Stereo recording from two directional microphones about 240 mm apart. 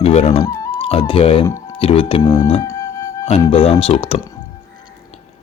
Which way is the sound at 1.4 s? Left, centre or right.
Centre.